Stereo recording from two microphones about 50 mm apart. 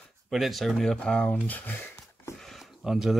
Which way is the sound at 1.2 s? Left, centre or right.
Left.